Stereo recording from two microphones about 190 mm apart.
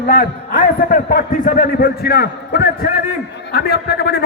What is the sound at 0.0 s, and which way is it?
A man's voice, 50° left (ahead or behind).